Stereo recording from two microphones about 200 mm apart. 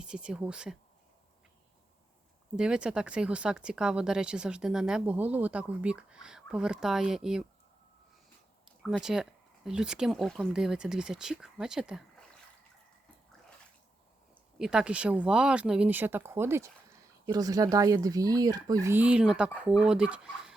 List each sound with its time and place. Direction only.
0.0 s speech: 5° right (ahead or behind)
2.6 s speech: 5° right (ahead or behind)
8.8 s speech: centre (ahead or behind)
14.6 s speech: 5° right (ahead or behind)